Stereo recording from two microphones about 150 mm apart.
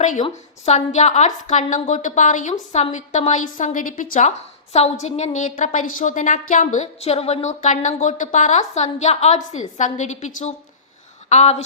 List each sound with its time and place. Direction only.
0.0 s a woman's voice: 50° left (ahead or behind)
5.0 s a woman's voice: 50° left (ahead or behind)